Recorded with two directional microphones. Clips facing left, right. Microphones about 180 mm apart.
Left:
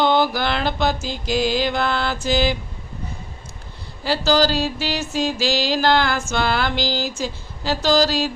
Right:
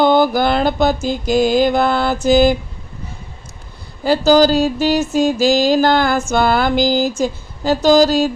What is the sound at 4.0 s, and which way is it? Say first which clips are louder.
Mantra: right 7 dB; 45° right (ahead or behind).